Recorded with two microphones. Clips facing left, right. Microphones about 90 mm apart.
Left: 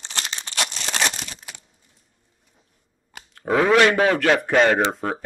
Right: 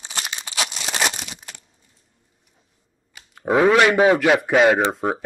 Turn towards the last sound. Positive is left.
turn(degrees=-10)  # may be behind; listen again after turning